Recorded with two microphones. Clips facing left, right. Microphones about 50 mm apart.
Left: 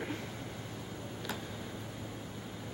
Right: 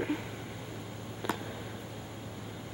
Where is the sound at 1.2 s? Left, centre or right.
Centre.